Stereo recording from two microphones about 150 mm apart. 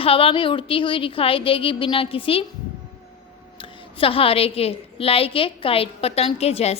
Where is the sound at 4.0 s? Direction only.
40° left (ahead or behind).